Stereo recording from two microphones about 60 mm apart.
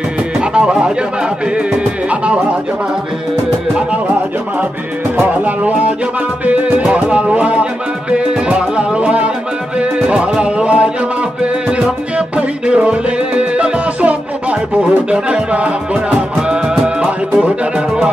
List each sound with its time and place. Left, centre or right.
0.4 s speech: centre
2.0 s music: centre
5.4 s music: right
12.4 s music: centre